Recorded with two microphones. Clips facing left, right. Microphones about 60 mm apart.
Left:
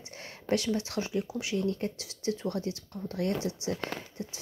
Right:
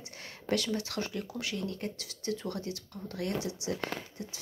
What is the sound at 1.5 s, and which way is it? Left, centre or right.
Speech, left.